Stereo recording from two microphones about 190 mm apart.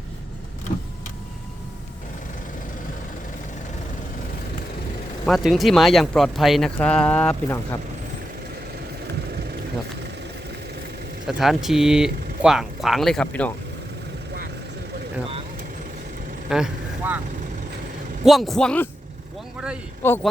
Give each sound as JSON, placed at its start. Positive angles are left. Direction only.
{"t": 5.2, "sound": "speech", "side_deg": 0}
{"t": 11.3, "sound": "speech", "side_deg": 0}
{"t": 16.5, "sound": "vehicle", "side_deg": -5}
{"t": 18.3, "sound": "speech", "side_deg": 0}
{"t": 20.0, "sound": "speech", "side_deg": 10}